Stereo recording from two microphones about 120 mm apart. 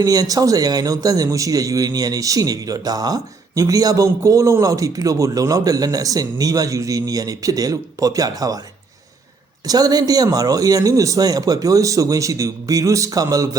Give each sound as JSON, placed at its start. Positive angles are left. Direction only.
{"t": 0.0, "sound": "a man's voice", "side_deg": -30}
{"t": 9.6, "sound": "a man's voice", "side_deg": -30}